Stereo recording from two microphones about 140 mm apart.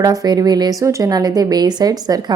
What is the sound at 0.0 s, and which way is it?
Speech, 25° right (ahead or behind).